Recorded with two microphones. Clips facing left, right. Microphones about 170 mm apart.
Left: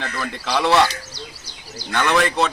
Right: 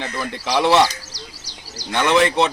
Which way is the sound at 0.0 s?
20° right (ahead or behind).